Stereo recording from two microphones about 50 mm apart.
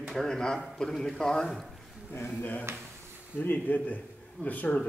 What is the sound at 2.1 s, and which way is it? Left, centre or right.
Speech, left.